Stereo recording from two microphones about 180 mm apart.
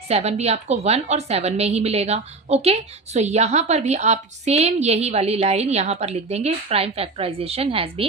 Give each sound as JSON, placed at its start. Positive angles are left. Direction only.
{"t": 0.1, "sound": "a woman's voice", "side_deg": -35}